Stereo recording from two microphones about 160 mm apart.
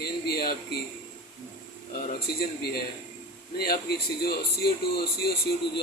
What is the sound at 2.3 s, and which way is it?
A man's voice, 75° left (ahead or behind).